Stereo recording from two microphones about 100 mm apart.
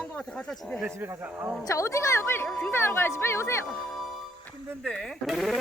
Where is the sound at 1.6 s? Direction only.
30° left (ahead or behind).